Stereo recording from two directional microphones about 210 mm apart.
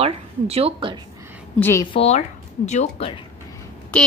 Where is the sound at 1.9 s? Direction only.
30° left (ahead or behind).